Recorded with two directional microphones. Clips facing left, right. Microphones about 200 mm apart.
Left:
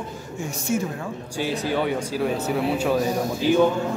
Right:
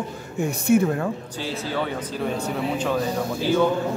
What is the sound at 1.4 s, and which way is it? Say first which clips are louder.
Speech: left 5 dB; 15° left (ahead or behind).